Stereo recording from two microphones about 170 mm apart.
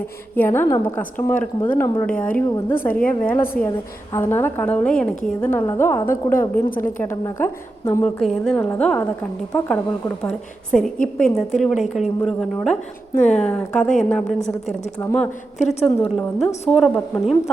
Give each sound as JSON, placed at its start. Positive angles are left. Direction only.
{"t": 0.3, "sound": "a woman's voice", "side_deg": 15}
{"t": 8.0, "sound": "a woman's voice", "side_deg": 0}
{"t": 15.5, "sound": "a woman's voice", "side_deg": 45}
{"t": 16.6, "sound": "a woman's voice", "side_deg": 0}